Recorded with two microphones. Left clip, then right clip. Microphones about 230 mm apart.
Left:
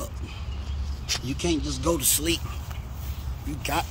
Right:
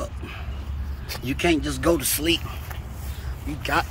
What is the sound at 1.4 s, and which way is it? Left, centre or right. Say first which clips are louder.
Speech: right 9 dB; right.